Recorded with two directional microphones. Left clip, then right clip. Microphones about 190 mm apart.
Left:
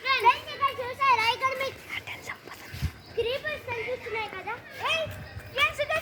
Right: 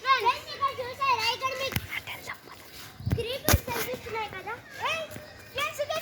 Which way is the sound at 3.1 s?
50° left (ahead or behind).